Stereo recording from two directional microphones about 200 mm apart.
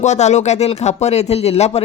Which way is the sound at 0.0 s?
35° left (ahead or behind).